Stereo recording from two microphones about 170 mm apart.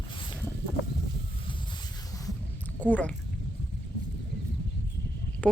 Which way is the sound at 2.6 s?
10° left (ahead or behind).